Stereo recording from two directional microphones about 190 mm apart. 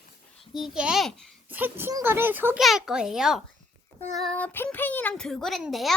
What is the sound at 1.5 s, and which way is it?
A child's voice, 10° right (ahead or behind).